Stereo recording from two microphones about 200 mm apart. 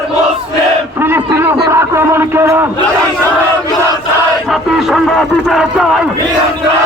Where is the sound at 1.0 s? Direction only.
10° right (ahead or behind).